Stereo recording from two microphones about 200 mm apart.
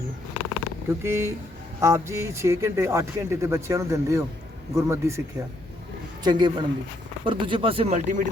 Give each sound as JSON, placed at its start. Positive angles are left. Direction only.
{"t": 0.9, "sound": "speech", "side_deg": -15}
{"t": 6.2, "sound": "speech", "side_deg": -20}